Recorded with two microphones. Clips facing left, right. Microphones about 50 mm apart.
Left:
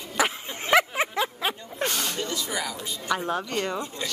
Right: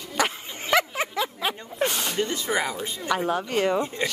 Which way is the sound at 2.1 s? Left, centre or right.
Right.